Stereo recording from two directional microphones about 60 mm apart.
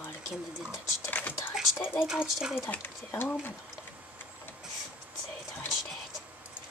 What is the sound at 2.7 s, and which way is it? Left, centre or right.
Speech, left.